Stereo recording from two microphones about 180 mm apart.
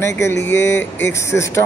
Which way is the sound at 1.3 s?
15° left (ahead or behind).